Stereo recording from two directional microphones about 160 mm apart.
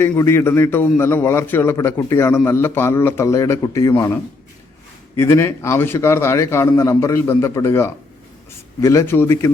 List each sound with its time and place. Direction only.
0.0 s a man's voice: 15° left (ahead or behind)